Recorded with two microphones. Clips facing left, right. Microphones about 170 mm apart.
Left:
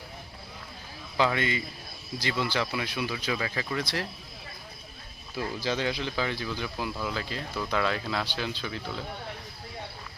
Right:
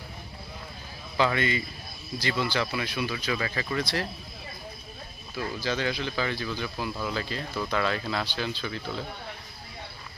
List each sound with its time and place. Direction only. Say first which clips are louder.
1.1 s speech: right 1 dB; 10° left (ahead or behind)
3.2 s speech: right 1 dB; 5° left (ahead or behind)
5.4 s speech: even; 25° left (ahead or behind)